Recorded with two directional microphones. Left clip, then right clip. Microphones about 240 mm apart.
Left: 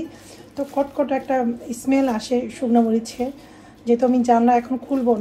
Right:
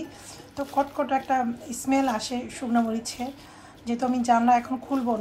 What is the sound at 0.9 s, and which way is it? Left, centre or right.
Speech, centre.